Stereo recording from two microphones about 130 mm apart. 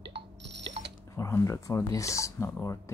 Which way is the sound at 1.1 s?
20° left (ahead or behind).